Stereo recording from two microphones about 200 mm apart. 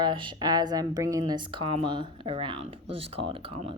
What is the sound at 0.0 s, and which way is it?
Speech, 25° right (ahead or behind).